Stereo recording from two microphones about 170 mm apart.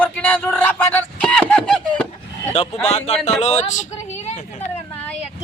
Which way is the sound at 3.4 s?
40° left (ahead or behind).